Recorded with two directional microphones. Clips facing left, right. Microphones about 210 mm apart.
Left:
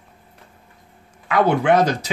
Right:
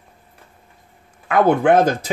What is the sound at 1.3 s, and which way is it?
Speech, 50° right (ahead or behind).